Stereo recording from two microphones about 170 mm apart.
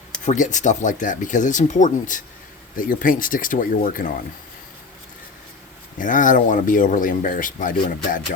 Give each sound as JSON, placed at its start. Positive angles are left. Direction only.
{"t": 0.3, "sound": "speech", "side_deg": 45}
{"t": 6.0, "sound": "speech", "side_deg": 50}